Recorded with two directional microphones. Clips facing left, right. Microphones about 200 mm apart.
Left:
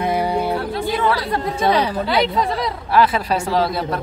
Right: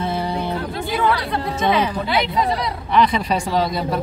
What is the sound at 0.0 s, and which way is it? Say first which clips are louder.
Music: left 4 dB; 15° left (ahead or behind).